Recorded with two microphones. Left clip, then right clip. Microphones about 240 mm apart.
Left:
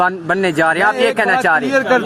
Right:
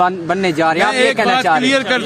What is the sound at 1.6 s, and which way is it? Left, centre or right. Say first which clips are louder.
Speech: right 1 dB; centre.